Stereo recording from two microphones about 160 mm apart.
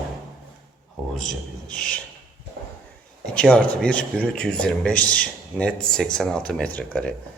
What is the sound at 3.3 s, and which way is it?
Speech, 5° left (ahead or behind).